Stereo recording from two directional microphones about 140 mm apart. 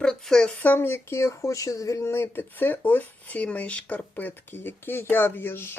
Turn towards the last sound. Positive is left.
turn(degrees=15)  # may be behind; listen again after turning